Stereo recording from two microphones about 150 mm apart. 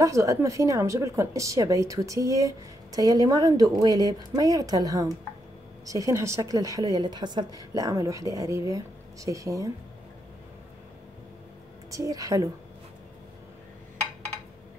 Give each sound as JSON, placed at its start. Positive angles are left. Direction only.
{"t": 0.0, "sound": "a woman's voice", "side_deg": -20}
{"t": 11.9, "sound": "a woman's voice", "side_deg": -20}